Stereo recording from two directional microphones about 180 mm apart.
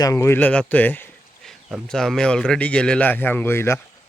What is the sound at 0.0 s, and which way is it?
Speech, 15° left (ahead or behind).